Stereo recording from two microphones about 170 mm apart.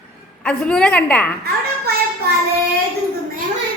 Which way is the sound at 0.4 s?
5° left (ahead or behind).